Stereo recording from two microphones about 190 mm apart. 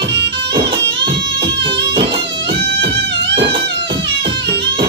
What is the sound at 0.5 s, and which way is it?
Music, 25° right (ahead or behind).